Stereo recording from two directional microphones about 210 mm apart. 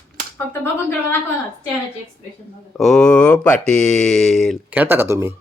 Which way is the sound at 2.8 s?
Centre (ahead or behind).